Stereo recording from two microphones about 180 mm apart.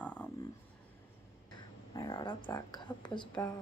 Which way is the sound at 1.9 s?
25° left (ahead or behind).